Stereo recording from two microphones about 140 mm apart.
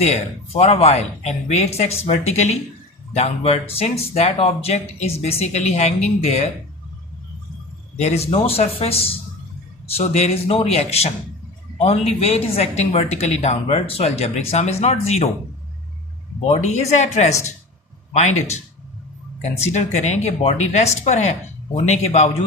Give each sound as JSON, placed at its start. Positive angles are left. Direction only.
{"t": 0.0, "sound": "a woman's voice", "side_deg": 50}
{"t": 7.9, "sound": "a woman's voice", "side_deg": 50}
{"t": 16.5, "sound": "a woman's voice", "side_deg": 50}
{"t": 19.7, "sound": "a woman's voice", "side_deg": 55}